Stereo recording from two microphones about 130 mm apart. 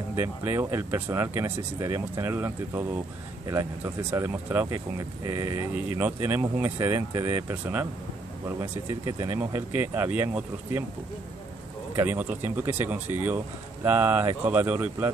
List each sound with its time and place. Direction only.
0.1 s speech: 20° right (ahead or behind)
11.9 s speech: 15° right (ahead or behind)